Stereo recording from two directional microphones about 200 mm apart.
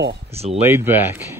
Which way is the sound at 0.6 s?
10° right (ahead or behind).